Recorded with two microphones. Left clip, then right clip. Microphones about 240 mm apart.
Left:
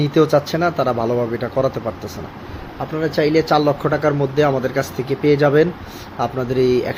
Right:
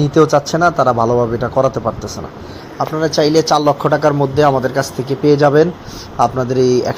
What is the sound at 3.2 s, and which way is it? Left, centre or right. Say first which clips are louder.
Speech: right 3 dB; centre.